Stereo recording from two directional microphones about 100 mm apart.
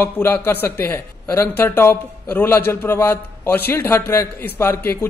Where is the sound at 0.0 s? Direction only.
20° left (ahead or behind).